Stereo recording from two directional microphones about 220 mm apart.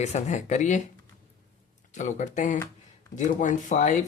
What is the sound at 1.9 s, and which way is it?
Speech, 35° left (ahead or behind).